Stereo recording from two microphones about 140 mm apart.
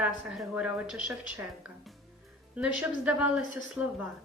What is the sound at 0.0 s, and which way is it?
A woman's voice, 5° right (ahead or behind).